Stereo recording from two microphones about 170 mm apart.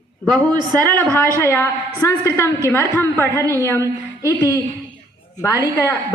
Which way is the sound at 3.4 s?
20° right (ahead or behind).